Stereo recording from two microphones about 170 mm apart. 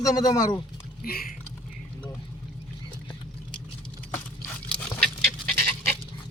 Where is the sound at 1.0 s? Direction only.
65° left (ahead or behind).